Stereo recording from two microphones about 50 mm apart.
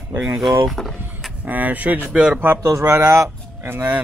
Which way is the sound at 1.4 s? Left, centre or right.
Right.